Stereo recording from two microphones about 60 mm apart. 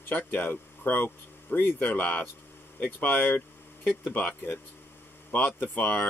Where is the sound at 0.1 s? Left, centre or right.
Left.